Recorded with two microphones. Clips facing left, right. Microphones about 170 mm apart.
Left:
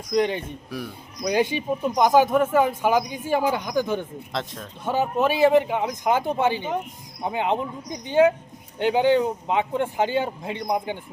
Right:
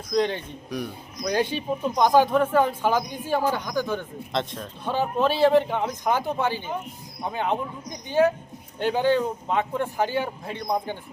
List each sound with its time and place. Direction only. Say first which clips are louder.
0.1 s speech: left 2 dB; 10° left (ahead or behind)
4.3 s speech: right 2 dB; centre (ahead or behind)